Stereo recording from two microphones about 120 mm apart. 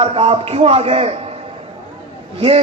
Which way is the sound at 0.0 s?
50° right (ahead or behind).